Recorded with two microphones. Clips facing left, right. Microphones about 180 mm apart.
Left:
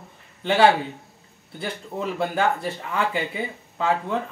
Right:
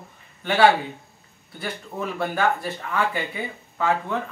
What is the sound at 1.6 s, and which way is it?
Speech, 20° left (ahead or behind).